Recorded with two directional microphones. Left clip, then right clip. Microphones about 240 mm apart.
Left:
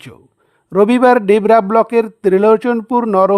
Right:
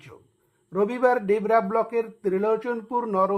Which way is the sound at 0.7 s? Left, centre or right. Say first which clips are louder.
Left 12 dB; left.